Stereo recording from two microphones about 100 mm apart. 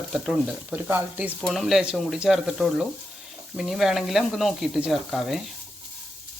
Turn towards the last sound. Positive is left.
turn(degrees=0)  # may be behind; listen again after turning